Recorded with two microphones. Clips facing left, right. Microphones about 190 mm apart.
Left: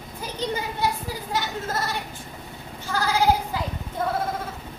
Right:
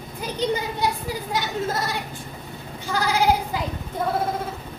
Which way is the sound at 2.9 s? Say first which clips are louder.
Right 1 dB; 15° right (ahead or behind).